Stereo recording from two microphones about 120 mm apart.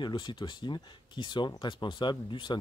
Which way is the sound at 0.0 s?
40° left (ahead or behind).